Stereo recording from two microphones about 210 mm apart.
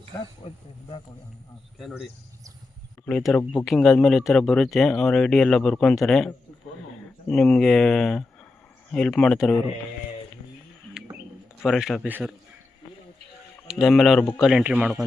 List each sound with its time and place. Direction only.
0.4 s speech: 25° left (ahead or behind)
1.8 s speech: 5° right (ahead or behind)
3.1 s speech: 5° left (ahead or behind)
11.6 s speech: centre (ahead or behind)
13.7 s speech: centre (ahead or behind)